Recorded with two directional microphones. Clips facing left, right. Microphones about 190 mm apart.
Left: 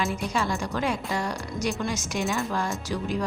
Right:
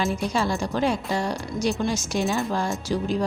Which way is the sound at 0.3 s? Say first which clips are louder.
Right 3 dB; 30° right (ahead or behind).